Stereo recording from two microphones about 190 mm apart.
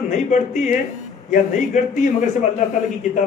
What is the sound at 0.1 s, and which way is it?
Speech, 40° left (ahead or behind).